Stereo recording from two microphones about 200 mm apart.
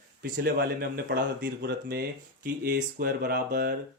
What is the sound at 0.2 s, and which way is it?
Speech, 50° right (ahead or behind).